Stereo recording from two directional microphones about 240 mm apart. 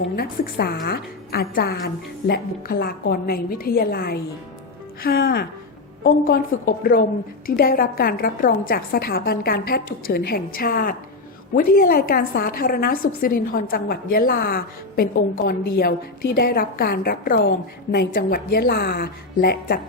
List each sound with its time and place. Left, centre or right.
0.2 s a woman's voice: left